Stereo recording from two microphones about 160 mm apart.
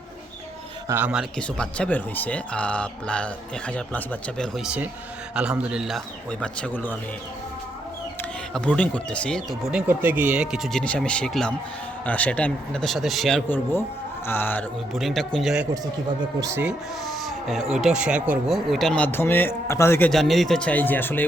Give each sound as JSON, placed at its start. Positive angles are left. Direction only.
{"t": 0.9, "sound": "speech", "side_deg": -10}
{"t": 1.4, "sound": "speech", "side_deg": 5}
{"t": 6.4, "sound": "speech", "side_deg": 10}
{"t": 8.5, "sound": "speech", "side_deg": 5}
{"t": 9.8, "sound": "speech", "side_deg": -10}
{"t": 14.3, "sound": "speech", "side_deg": 15}
{"t": 14.9, "sound": "speech", "side_deg": 0}
{"t": 16.4, "sound": "speech", "side_deg": -15}
{"t": 17.1, "sound": "speech", "side_deg": 0}
{"t": 20.1, "sound": "speech", "side_deg": 0}